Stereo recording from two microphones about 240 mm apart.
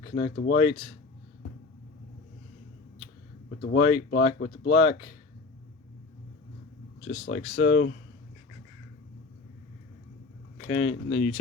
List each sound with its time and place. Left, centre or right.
0.2 s speech: left
0.6 s speech: left
3.6 s speech: left
7.3 s speech: left
10.7 s speech: left
11.1 s speech: left